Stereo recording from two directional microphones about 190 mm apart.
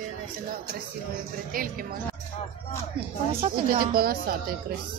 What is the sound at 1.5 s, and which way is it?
Speech, 50° right (ahead or behind).